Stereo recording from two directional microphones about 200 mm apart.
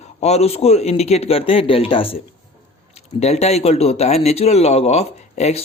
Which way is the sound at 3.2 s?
35° left (ahead or behind).